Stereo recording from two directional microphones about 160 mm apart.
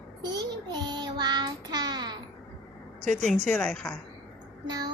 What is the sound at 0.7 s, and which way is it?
Child singing, 25° right (ahead or behind).